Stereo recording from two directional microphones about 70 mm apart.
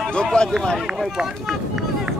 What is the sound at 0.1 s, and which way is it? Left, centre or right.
Speech, centre.